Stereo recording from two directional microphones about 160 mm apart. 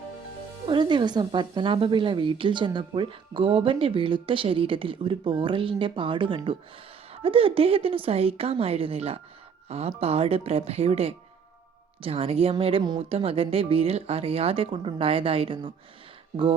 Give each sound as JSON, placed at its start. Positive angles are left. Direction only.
{"t": 0.7, "sound": "a woman's voice", "side_deg": -30}